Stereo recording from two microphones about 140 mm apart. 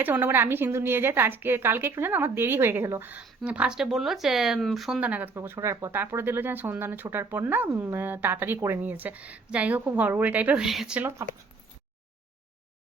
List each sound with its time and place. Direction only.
0.0 s speech: 15° right (ahead or behind)